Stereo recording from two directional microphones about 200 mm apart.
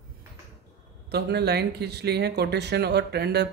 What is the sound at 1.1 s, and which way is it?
Speech, 55° right (ahead or behind).